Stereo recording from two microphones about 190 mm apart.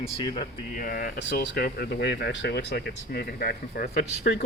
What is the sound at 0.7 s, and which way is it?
Speech, 45° left (ahead or behind).